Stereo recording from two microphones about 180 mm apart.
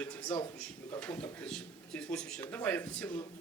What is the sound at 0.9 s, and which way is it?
Speech, 10° left (ahead or behind).